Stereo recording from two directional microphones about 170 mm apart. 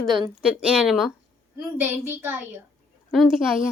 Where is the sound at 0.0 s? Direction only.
5° right (ahead or behind).